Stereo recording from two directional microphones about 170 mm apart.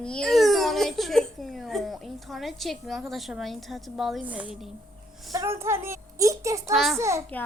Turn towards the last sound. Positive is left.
turn(degrees=-15)  # may be behind; listen again after turning